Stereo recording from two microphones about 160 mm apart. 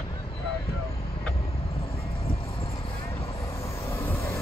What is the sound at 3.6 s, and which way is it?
Vehicle, 15° left (ahead or behind).